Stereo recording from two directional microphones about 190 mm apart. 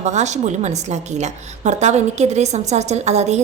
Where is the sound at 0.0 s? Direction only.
40° right (ahead or behind).